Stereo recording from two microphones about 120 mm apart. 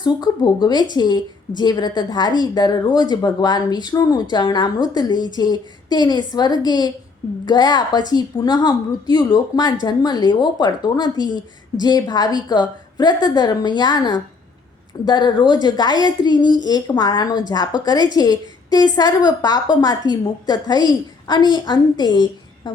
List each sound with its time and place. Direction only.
0.0 s a woman's voice: 35° left (ahead or behind)